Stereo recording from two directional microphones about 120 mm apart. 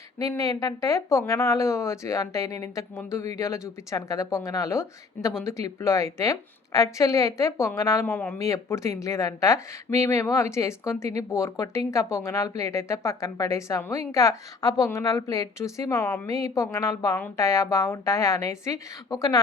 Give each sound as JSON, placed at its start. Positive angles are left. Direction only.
{"t": 0.2, "sound": "speech", "side_deg": 30}